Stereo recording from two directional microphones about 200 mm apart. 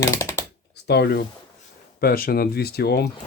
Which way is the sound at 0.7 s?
55° left (ahead or behind).